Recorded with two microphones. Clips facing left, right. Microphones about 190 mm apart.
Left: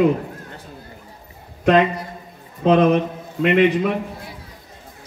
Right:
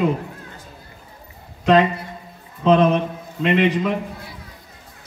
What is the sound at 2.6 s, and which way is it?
A man's voice, 55° left (ahead or behind).